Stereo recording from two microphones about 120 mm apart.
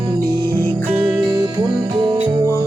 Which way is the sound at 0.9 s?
10° right (ahead or behind).